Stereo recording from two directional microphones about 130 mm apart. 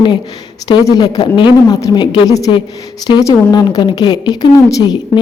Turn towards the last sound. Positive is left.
turn(degrees=35)  # may be behind; listen again after turning